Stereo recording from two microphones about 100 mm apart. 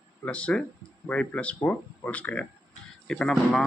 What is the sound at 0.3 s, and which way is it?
Speech, 10° left (ahead or behind).